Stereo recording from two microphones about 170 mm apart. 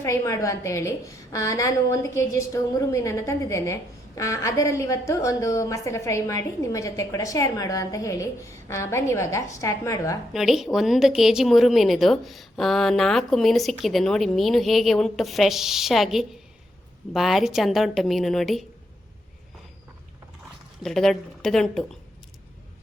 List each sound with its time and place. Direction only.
0.0 s a woman's voice: 15° left (ahead or behind)
10.3 s a woman's voice: centre (ahead or behind)
20.8 s a woman's voice: centre (ahead or behind)